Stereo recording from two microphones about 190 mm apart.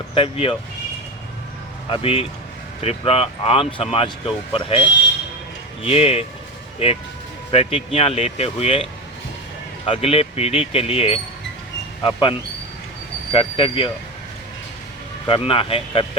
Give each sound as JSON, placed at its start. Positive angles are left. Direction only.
{"t": 0.1, "sound": "speech", "side_deg": 30}
{"t": 1.9, "sound": "speech", "side_deg": 30}
{"t": 7.5, "sound": "speech", "side_deg": 30}
{"t": 15.3, "sound": "speech", "side_deg": 30}